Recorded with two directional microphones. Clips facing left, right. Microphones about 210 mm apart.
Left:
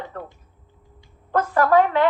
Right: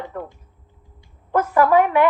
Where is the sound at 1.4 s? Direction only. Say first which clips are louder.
Right 1 dB; 10° right (ahead or behind).